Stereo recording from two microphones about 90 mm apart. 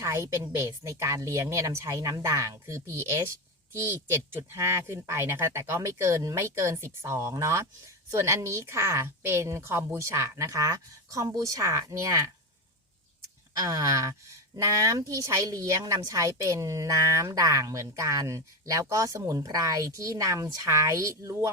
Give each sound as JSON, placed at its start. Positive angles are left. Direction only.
{"t": 0.0, "sound": "a woman's voice", "side_deg": -30}
{"t": 4.4, "sound": "a woman's voice", "side_deg": -30}
{"t": 13.6, "sound": "a woman's voice", "side_deg": -40}